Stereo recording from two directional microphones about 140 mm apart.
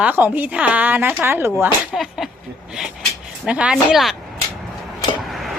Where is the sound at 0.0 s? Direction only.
15° right (ahead or behind).